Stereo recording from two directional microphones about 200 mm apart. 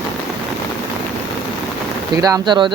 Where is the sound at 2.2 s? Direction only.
20° right (ahead or behind).